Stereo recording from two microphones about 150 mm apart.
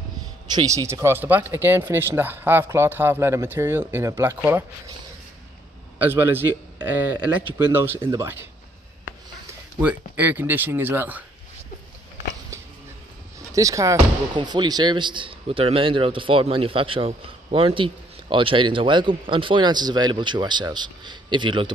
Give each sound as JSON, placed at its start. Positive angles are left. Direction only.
{"t": 0.5, "sound": "speech", "side_deg": -25}
{"t": 5.9, "sound": "speech", "side_deg": -15}
{"t": 9.8, "sound": "speech", "side_deg": -10}
{"t": 13.5, "sound": "speech", "side_deg": -20}